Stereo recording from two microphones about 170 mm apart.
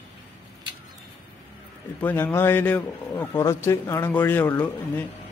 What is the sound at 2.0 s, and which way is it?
Speech, 10° left (ahead or behind).